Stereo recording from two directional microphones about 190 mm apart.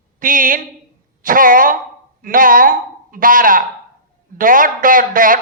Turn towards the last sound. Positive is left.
turn(degrees=-45)  # may be behind; listen again after turning